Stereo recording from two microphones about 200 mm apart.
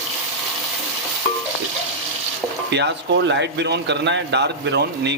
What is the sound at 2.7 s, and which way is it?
Speech, 60° right (ahead or behind).